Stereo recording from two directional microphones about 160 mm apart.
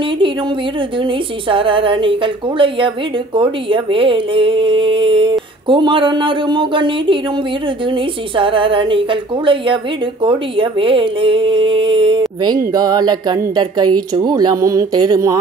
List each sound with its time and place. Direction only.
0.9 s a woman's voice: 30° right (ahead or behind)